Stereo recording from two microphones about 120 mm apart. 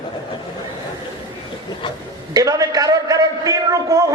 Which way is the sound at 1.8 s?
40° left (ahead or behind).